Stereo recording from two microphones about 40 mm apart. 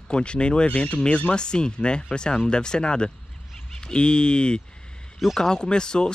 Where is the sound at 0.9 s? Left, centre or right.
Left.